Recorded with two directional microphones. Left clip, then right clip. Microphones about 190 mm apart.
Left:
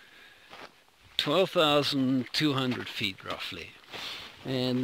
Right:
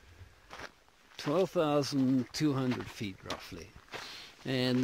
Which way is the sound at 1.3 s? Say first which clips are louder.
Left 5 dB; centre (ahead or behind).